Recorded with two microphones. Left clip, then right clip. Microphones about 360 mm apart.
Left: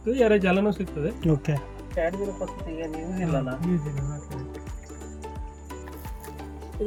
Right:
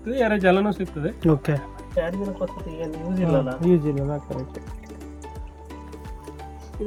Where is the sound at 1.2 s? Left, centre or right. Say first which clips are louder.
Right 6 dB; centre.